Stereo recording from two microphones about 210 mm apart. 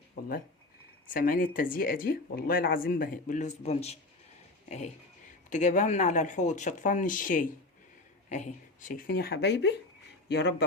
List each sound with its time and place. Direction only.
1.1 s speech: 45° left (ahead or behind)
5.5 s speech: 35° left (ahead or behind); by 10.7 s 55° left (ahead or behind)